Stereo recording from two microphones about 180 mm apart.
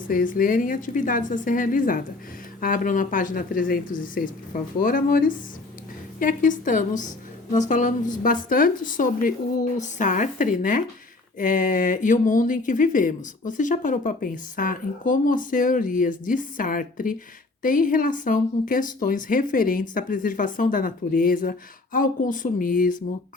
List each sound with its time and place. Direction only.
0.1 s speech: 50° left (ahead or behind)